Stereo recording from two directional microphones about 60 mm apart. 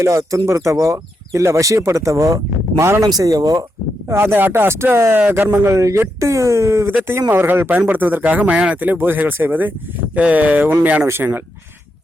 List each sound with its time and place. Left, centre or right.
0.0 s speech: right
3.2 s speech: right
4.1 s speech: right
4.7 s speech: right
5.3 s speech: right
5.6 s speech: right
7.3 s speech: right